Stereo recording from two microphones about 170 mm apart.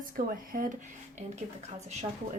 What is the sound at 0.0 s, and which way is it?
Speech, 55° right (ahead or behind).